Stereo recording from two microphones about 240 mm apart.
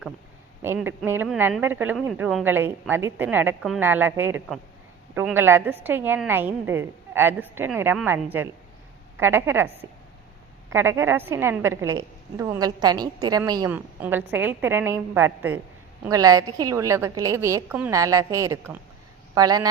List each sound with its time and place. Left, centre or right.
0.6 s a woman's voice: centre
10.7 s a woman's voice: centre